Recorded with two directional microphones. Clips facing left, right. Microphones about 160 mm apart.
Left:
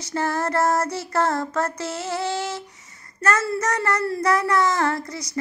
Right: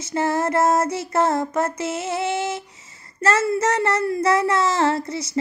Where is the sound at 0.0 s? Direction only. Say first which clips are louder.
Right 3 dB; 25° right (ahead or behind).